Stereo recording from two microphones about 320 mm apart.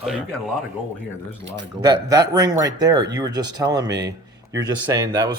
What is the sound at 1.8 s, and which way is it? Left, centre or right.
Speech, centre.